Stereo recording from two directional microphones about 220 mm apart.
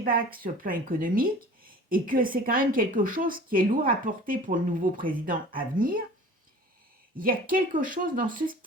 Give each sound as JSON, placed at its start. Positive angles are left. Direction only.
{"t": 0.0, "sound": "speech", "side_deg": -40}
{"t": 7.2, "sound": "speech", "side_deg": -40}